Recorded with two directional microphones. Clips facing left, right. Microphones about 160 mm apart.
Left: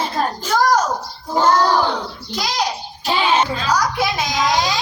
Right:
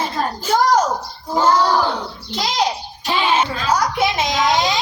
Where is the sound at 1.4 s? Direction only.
5° right (ahead or behind).